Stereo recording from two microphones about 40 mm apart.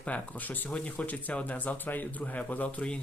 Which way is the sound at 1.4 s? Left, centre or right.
Left.